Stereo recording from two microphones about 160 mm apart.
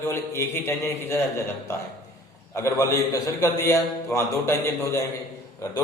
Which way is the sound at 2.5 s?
20° left (ahead or behind).